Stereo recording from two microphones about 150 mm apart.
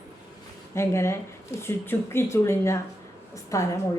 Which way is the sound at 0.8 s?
15° left (ahead or behind).